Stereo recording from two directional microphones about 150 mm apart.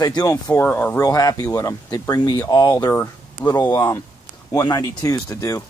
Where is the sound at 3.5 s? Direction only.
30° left (ahead or behind).